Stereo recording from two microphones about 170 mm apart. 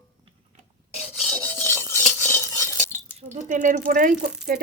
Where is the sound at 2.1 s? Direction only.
15° left (ahead or behind).